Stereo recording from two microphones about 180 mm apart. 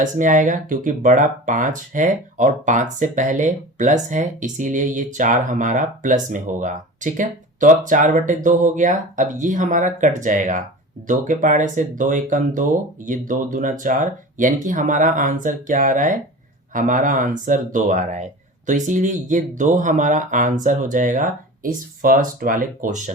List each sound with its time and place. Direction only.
0.0 s speech: 45° right (ahead or behind)